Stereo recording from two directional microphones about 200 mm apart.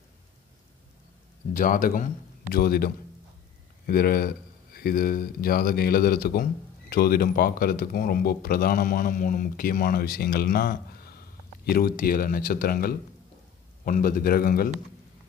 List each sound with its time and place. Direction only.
1.5 s speech: 40° left (ahead or behind)